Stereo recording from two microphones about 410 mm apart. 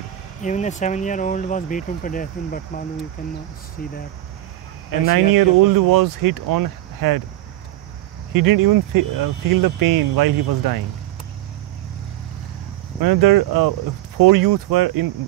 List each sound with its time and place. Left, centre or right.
0.4 s speech: centre
5.1 s speech: right
8.3 s speech: right
13.0 s speech: right